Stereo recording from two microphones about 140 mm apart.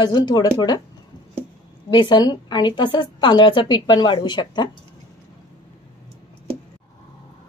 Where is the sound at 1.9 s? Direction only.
35° left (ahead or behind).